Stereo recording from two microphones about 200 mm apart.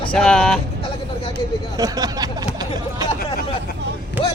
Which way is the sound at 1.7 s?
20° right (ahead or behind).